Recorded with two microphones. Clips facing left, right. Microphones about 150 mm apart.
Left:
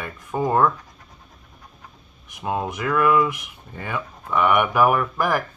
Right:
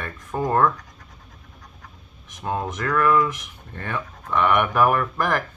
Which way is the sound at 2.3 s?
10° left (ahead or behind).